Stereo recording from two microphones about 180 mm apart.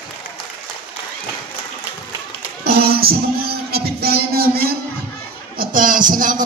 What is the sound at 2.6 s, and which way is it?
Music, 60° right (ahead or behind).